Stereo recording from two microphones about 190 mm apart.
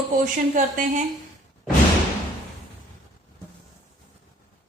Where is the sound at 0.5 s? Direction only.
40° right (ahead or behind).